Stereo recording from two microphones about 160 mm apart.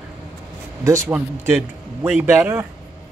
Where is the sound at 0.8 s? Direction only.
20° right (ahead or behind).